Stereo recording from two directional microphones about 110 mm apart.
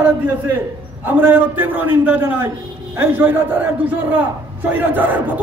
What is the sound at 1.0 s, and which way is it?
A man's voice, 20° right (ahead or behind).